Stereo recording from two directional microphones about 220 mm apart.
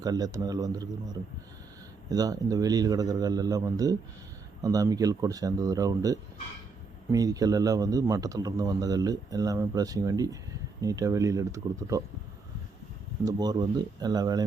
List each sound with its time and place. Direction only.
0.0 s a man's voice: 15° right (ahead or behind)
13.2 s a man's voice: 15° right (ahead or behind)